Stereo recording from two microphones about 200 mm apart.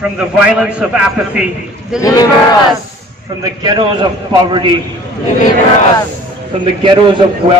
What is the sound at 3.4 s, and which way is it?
Speech, 20° right (ahead or behind).